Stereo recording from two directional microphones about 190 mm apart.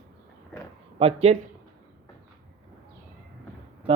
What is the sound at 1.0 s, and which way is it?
Speech, 30° right (ahead or behind).